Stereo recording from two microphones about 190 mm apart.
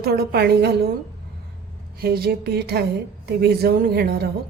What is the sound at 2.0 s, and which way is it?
A woman's voice, 55° right (ahead or behind).